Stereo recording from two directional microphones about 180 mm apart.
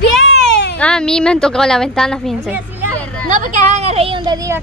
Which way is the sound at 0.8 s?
5° left (ahead or behind).